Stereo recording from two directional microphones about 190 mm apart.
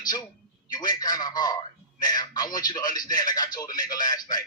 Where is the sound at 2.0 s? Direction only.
20° left (ahead or behind).